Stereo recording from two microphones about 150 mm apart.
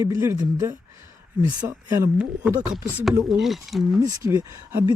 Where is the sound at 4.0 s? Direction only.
20° right (ahead or behind).